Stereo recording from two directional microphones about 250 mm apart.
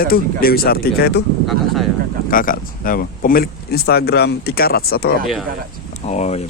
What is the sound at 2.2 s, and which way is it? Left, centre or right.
Speech, left.